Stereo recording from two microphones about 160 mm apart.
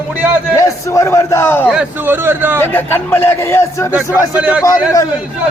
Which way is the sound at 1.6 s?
5° right (ahead or behind).